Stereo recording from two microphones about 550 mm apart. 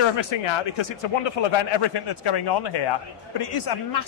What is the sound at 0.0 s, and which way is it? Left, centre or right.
Speech, left.